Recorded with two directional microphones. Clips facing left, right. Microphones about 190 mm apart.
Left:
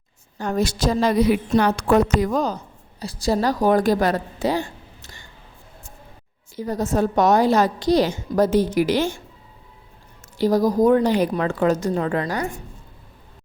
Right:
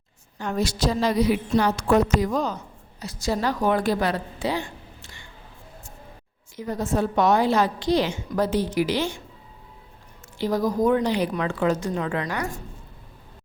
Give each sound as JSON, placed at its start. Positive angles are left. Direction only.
{"t": 0.3, "sound": "a woman's voice", "side_deg": 45}
{"t": 3.0, "sound": "a woman's voice", "side_deg": 35}
{"t": 6.6, "sound": "a woman's voice", "side_deg": 40}
{"t": 10.3, "sound": "a woman's voice", "side_deg": 40}